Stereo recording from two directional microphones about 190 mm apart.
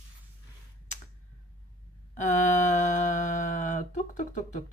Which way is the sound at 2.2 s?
40° left (ahead or behind).